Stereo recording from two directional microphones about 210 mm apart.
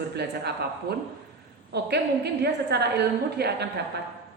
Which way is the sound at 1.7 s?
50° right (ahead or behind).